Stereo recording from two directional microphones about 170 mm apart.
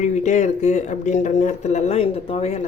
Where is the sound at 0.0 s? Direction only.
45° left (ahead or behind).